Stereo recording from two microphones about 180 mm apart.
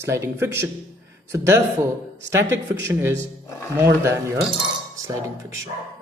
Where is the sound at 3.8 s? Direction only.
15° right (ahead or behind).